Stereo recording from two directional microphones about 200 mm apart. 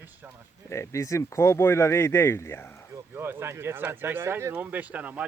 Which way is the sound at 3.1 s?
10° right (ahead or behind).